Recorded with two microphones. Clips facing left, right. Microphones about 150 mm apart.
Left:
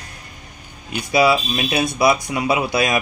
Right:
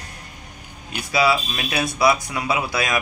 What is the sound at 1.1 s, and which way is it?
Speech, 20° left (ahead or behind).